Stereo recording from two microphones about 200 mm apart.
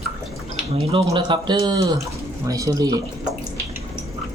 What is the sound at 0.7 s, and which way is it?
Speech, 20° right (ahead or behind).